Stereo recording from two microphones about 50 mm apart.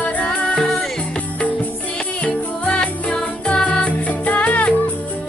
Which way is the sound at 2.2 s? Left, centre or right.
Left.